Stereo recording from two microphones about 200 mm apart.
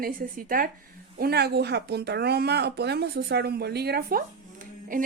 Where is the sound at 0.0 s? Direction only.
45° right (ahead or behind).